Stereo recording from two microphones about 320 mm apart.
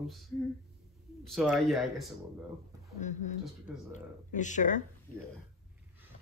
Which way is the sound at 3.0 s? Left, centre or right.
Left.